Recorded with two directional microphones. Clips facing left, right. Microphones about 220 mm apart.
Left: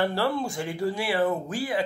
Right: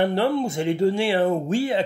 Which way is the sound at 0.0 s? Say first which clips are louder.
Right 5 dB; 20° right (ahead or behind).